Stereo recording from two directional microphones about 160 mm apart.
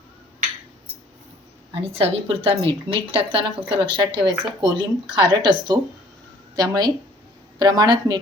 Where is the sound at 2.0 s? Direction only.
35° right (ahead or behind).